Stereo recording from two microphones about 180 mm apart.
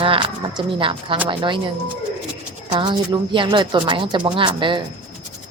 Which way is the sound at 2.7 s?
25° right (ahead or behind).